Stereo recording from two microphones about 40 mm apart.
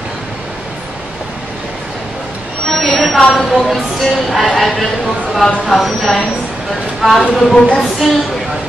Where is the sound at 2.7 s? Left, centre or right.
Centre.